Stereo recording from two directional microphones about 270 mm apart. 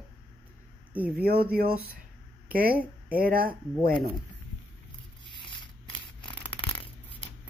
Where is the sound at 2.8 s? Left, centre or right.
Centre.